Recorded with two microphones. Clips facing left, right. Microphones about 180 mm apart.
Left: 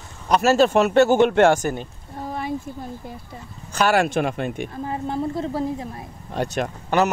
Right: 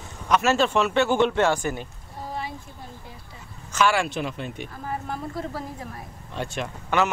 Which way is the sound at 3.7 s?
45° left (ahead or behind).